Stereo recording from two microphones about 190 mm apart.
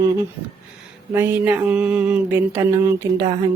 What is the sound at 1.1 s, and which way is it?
A man's voice, 10° right (ahead or behind).